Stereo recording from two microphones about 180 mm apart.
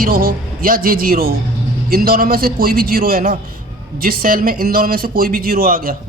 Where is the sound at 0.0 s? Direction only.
50° right (ahead or behind).